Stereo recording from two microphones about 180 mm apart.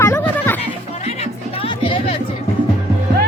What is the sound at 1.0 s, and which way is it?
Music, 35° left (ahead or behind).